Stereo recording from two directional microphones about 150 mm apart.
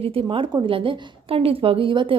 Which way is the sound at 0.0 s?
40° right (ahead or behind).